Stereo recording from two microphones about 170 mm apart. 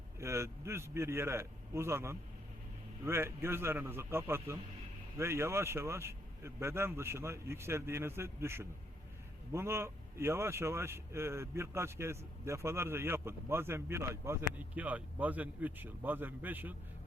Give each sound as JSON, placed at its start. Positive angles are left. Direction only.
{"t": 0.2, "sound": "speech", "side_deg": -15}